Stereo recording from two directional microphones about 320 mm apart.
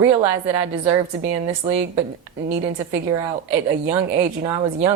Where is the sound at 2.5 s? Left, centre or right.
Centre.